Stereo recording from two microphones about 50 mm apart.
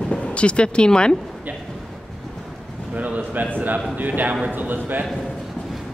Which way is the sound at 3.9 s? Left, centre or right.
Right.